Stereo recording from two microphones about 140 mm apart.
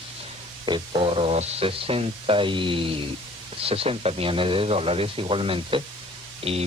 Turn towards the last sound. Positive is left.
turn(degrees=-45)  # may be behind; listen again after turning